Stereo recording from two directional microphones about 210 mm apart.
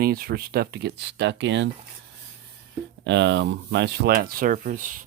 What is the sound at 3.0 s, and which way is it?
Speech, 55° right (ahead or behind).